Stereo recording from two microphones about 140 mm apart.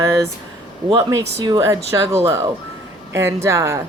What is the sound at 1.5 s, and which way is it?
Speech, 25° right (ahead or behind).